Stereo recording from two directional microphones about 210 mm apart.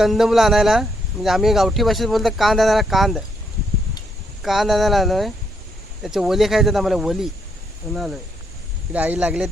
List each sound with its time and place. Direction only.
0.0 s speech: centre (ahead or behind)
4.4 s speech: centre (ahead or behind)
8.9 s speech: 5° right (ahead or behind)